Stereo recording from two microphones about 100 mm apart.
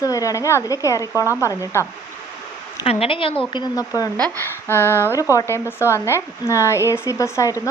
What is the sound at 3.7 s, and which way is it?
Speech, 35° left (ahead or behind).